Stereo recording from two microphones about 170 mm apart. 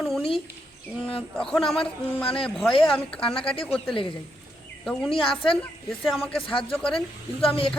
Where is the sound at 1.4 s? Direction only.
5° left (ahead or behind).